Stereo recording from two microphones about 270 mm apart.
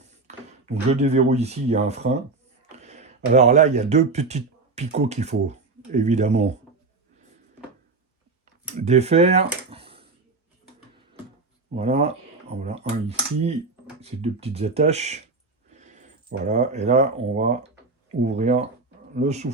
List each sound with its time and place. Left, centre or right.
0.3 s speech: right
8.8 s speech: right
9.6 s a sound: right
11.7 s speech: right